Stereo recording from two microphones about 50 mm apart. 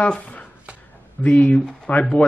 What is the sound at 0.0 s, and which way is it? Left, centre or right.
Speech, left.